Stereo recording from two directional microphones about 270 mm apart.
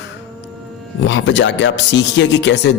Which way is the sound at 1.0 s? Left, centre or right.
Left.